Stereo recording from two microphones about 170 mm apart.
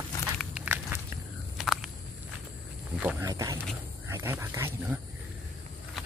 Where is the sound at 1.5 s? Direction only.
Centre (ahead or behind).